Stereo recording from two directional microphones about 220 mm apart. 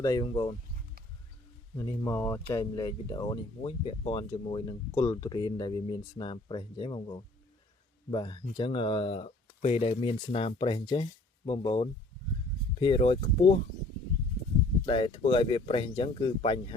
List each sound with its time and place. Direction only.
0.0 s speech: 15° left (ahead or behind)
1.7 s speech: 15° left (ahead or behind)
14.8 s speech: 20° left (ahead or behind)